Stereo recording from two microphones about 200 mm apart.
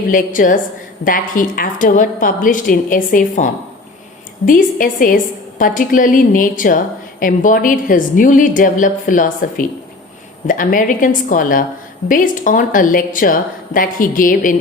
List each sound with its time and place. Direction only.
0.1 s a woman's voice: 40° left (ahead or behind)